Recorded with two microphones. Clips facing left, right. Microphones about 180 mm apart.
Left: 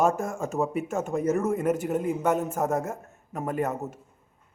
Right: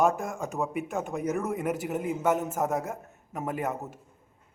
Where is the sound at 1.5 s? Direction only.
15° right (ahead or behind).